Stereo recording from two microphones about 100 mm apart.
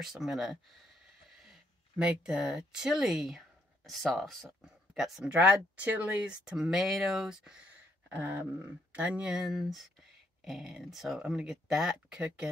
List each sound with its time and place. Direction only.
0.0 s speech: 5° right (ahead or behind)
5.3 s speech: 15° right (ahead or behind)
8.1 s speech: 20° right (ahead or behind)